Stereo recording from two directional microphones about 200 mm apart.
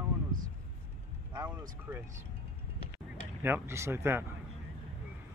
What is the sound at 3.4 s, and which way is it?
Speech, 10° right (ahead or behind).